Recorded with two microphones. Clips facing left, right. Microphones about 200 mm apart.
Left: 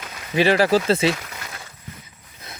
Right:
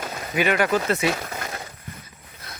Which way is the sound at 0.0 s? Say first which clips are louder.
Right 6 dB; 45° right (ahead or behind).